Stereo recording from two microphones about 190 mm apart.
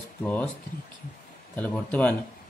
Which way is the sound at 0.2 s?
5° left (ahead or behind).